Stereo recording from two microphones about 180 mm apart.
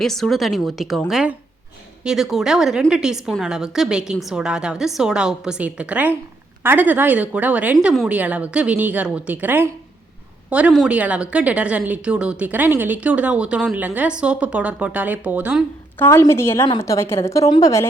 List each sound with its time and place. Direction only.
0.0 s a woman's voice: centre (ahead or behind)
16.0 s a woman's voice: 15° left (ahead or behind)